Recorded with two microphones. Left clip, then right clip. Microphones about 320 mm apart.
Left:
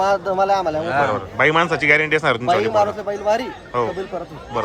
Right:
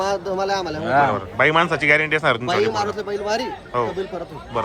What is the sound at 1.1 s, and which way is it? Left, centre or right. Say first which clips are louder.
A man's voice: left 1 dB; centre.